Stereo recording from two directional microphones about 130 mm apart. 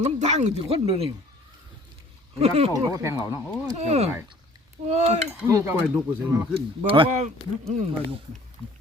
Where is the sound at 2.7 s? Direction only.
25° right (ahead or behind).